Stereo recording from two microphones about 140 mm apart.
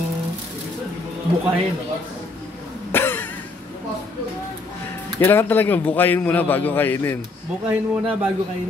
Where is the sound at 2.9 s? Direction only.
15° left (ahead or behind).